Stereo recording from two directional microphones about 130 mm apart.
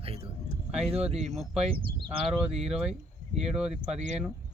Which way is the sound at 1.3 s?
5° right (ahead or behind).